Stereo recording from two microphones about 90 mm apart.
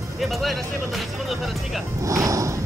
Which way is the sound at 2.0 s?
35° right (ahead or behind).